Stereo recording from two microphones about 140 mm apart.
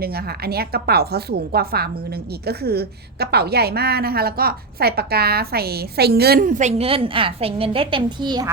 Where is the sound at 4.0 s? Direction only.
90° right; by 8.4 s 30° right (ahead or behind).